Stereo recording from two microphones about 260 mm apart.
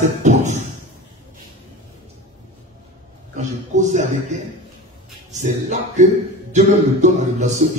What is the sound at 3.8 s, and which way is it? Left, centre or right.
Music, right.